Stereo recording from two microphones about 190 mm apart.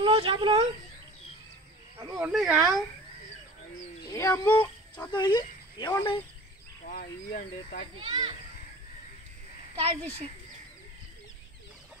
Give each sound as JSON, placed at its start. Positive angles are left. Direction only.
{"t": 0.0, "sound": "speech", "side_deg": -25}
{"t": 2.1, "sound": "speech", "side_deg": 0}
{"t": 4.1, "sound": "speech", "side_deg": 15}
{"t": 6.9, "sound": "speech", "side_deg": 50}
{"t": 8.0, "sound": "a child's voice", "side_deg": -25}